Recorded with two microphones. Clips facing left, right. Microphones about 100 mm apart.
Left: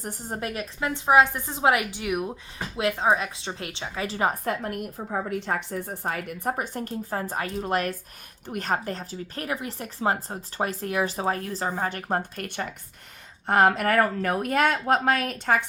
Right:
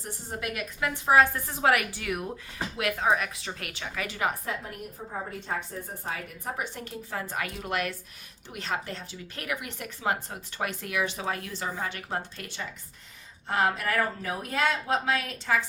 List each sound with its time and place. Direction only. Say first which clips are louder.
0.0 s a woman's voice: left 3 dB; 40° left (ahead or behind)
4.4 s a woman's voice: left 7 dB; 65° left (ahead or behind)
6.1 s speech: left 7 dB; 50° left (ahead or behind)